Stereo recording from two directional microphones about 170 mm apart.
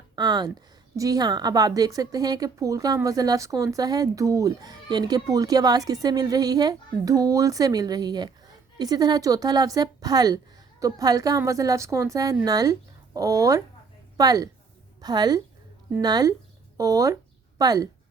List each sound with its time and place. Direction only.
0.2 s a woman's voice: 25° right (ahead or behind)